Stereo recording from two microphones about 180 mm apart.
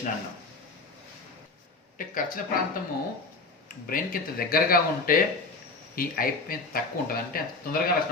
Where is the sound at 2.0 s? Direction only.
50° left (ahead or behind).